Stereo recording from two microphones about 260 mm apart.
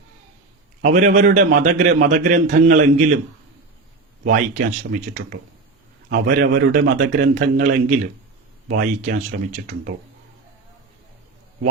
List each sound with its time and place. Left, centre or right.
0.8 s a man's voice: right
4.2 s speech: right
6.1 s a man's voice: right